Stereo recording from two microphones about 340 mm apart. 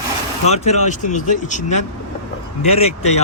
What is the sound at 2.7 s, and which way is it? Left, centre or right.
Speech, centre.